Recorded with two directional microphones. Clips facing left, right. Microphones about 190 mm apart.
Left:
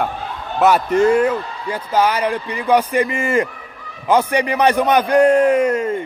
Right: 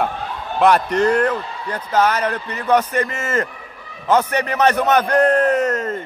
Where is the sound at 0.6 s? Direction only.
5° left (ahead or behind).